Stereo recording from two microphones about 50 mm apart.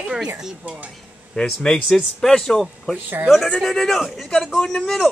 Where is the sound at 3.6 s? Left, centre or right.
Centre.